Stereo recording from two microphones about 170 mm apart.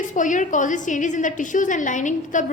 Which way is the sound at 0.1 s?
50° left (ahead or behind).